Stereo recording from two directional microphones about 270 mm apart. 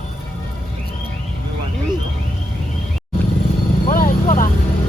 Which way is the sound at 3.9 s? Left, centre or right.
Left.